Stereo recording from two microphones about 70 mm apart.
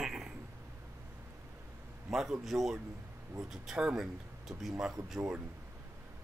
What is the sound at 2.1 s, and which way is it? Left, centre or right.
Speech, centre.